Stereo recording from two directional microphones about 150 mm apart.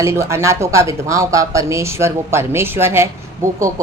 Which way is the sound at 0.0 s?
20° right (ahead or behind).